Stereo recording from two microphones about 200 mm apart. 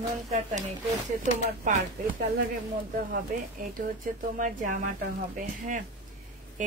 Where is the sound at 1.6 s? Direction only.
40° right (ahead or behind).